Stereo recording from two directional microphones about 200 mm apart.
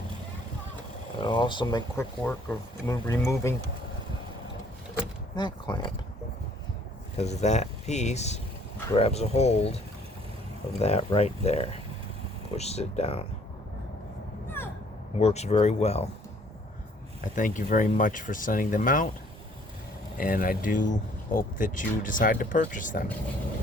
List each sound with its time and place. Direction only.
1.2 s speech: 25° left (ahead or behind)
5.4 s speech: 20° left (ahead or behind)
7.2 s speech: 35° left (ahead or behind)
10.8 s speech: 30° left (ahead or behind)
15.2 s speech: 35° left (ahead or behind)
17.2 s speech: 40° left (ahead or behind)
20.1 s speech: 45° left (ahead or behind)